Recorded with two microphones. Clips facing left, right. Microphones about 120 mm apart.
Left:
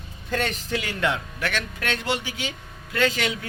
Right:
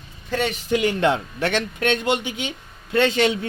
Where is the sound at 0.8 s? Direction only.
25° right (ahead or behind).